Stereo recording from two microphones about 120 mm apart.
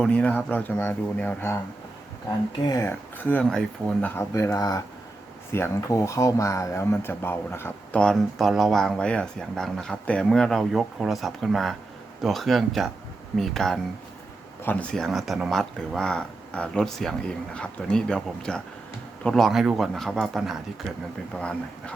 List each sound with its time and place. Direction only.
0.0 s speech: 10° left (ahead or behind)
2.6 s speech: 25° left (ahead or behind)
3.2 s speech: 15° left (ahead or behind)
4.1 s speech: 25° left (ahead or behind)
7.9 s speech: 5° left (ahead or behind)
14.6 s speech: 15° left (ahead or behind)